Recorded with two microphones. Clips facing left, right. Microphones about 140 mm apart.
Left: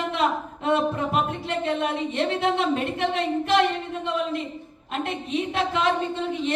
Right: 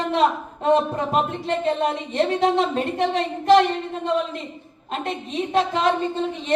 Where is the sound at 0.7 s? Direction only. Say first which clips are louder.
Right 3 dB; 35° right (ahead or behind).